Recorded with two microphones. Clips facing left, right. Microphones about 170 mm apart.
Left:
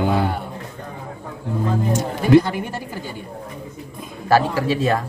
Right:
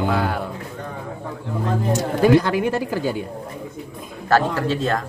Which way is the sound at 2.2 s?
90° right.